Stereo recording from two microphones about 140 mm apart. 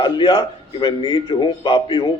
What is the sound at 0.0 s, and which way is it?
A man's voice, 35° left (ahead or behind).